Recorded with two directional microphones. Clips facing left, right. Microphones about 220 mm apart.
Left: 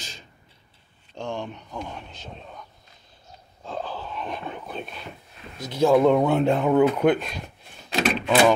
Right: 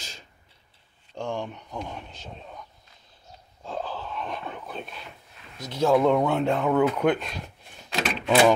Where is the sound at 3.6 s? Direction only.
5° right (ahead or behind).